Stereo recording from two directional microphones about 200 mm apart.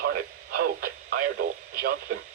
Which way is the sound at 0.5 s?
45° right (ahead or behind).